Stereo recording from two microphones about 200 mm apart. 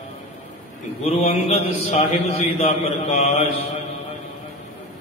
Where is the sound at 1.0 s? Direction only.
30° left (ahead or behind).